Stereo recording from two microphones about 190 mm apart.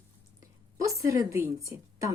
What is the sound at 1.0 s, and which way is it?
Speech, 15° right (ahead or behind).